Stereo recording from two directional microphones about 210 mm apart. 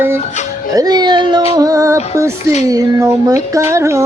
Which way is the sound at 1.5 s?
15° right (ahead or behind).